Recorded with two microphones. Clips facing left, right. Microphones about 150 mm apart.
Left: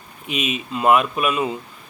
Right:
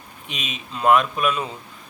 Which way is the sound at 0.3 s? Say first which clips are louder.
Left 9 dB; 5° left (ahead or behind).